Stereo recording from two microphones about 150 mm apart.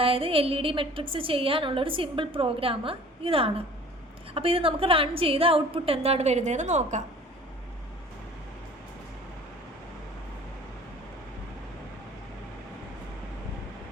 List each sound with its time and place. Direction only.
0.0 s a woman's voice: 40° right (ahead or behind)